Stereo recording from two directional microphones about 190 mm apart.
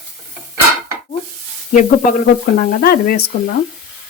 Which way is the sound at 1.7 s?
40° left (ahead or behind).